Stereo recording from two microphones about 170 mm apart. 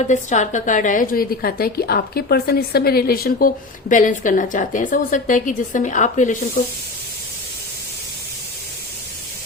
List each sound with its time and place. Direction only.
0.1 s a woman's voice: 45° left (ahead or behind)